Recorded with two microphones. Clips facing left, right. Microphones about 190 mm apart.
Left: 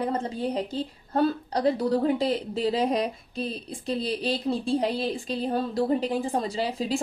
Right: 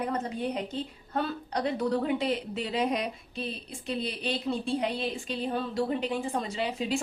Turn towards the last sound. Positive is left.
turn(degrees=35)  # may be behind; listen again after turning